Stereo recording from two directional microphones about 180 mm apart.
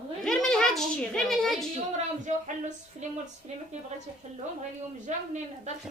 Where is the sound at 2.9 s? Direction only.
45° right (ahead or behind).